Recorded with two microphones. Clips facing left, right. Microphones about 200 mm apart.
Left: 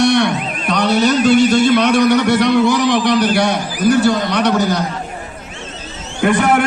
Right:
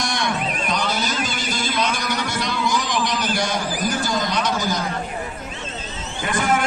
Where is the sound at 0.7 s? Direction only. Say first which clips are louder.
Left 13 dB; 65° left (ahead or behind).